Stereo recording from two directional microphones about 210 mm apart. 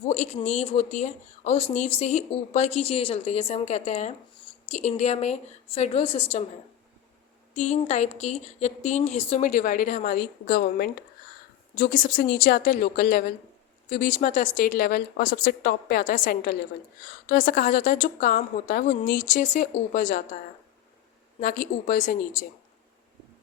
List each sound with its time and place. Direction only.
0.1 s speech: 30° left (ahead or behind)
7.5 s speech: 35° left (ahead or behind)
21.4 s speech: 40° left (ahead or behind)